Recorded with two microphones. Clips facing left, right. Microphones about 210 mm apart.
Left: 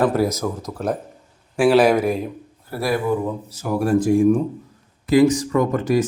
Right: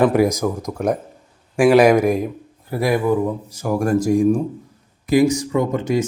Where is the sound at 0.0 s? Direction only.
15° right (ahead or behind).